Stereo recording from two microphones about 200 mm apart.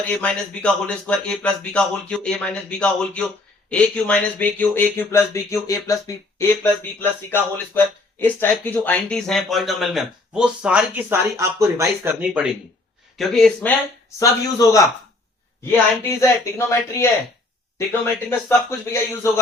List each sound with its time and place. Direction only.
0.0 s speech: 5° left (ahead or behind)
14.2 s speech: 15° left (ahead or behind)
16.4 s speech: 15° left (ahead or behind)